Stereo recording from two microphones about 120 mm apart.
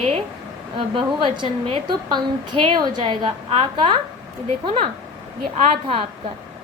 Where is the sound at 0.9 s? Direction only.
45° right (ahead or behind).